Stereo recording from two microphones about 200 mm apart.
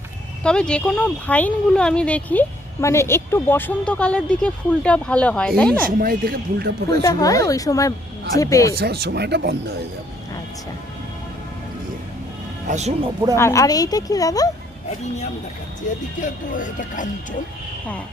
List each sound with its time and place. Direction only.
0.4 s speech: 5° left (ahead or behind)
6.0 s speech: 45° right (ahead or behind)
7.0 s speech: 15° left (ahead or behind)
8.8 s speech: 55° right (ahead or behind)
12.6 s speech: 35° right (ahead or behind)
13.3 s speech: 15° left (ahead or behind)
16.2 s speech: 40° left (ahead or behind)